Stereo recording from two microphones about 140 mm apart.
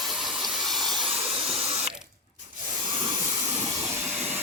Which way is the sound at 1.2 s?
45° right (ahead or behind).